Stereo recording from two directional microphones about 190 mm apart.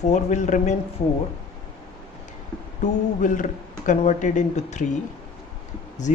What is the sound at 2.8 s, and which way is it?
Speech, 40° left (ahead or behind).